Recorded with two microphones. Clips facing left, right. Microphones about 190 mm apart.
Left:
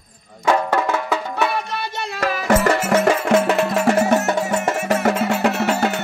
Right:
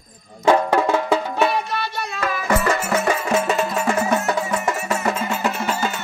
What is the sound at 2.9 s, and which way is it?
Music, 70° left (ahead or behind).